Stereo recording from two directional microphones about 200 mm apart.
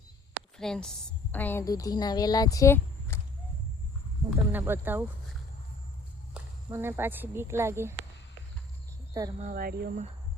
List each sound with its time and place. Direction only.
0.5 s a woman's voice: 5° left (ahead or behind)
4.3 s speech: 10° right (ahead or behind)
6.3 s speech: 10° right (ahead or behind)
9.4 s speech: 45° right (ahead or behind)